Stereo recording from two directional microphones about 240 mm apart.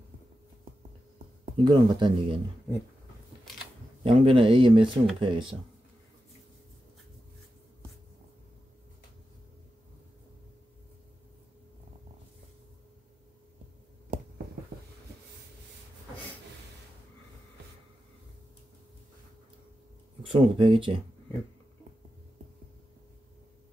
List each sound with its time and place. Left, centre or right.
1.6 s speech: centre
4.0 s speech: right
20.2 s speech: right